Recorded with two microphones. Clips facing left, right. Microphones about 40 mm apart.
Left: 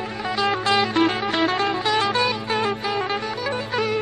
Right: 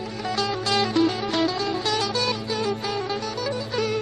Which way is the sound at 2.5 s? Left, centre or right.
Left.